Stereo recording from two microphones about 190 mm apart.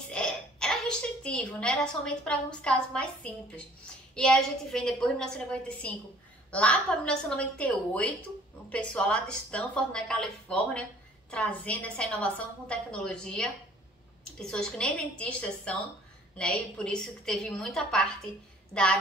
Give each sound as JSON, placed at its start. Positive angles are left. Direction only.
{"t": 0.1, "sound": "a woman's voice", "side_deg": 5}
{"t": 4.1, "sound": "a woman's voice", "side_deg": 0}